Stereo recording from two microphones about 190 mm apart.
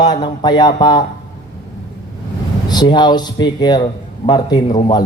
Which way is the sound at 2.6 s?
20° left (ahead or behind).